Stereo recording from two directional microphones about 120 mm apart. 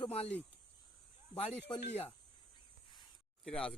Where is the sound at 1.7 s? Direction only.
40° left (ahead or behind).